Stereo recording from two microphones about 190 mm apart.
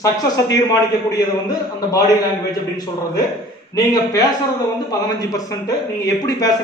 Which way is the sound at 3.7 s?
20° left (ahead or behind).